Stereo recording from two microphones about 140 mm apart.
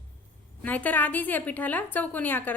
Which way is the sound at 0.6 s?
10° left (ahead or behind).